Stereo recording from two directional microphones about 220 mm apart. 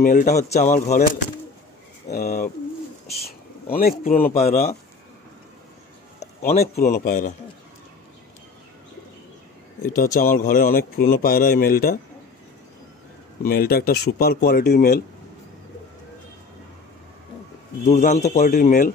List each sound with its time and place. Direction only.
0.0 s speech: 35° left (ahead or behind)
2.0 s speech: 45° left (ahead or behind)
6.5 s speech: 30° left (ahead or behind)
6.8 s speech: 40° left (ahead or behind)
9.9 s speech: 40° left (ahead or behind)
13.4 s speech: 45° left (ahead or behind)
17.8 s speech: 30° left (ahead or behind)